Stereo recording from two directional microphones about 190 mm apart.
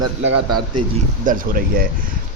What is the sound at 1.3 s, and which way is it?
Speech, 45° right (ahead or behind).